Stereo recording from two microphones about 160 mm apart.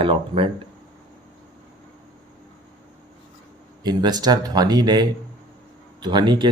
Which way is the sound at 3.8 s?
25° right (ahead or behind).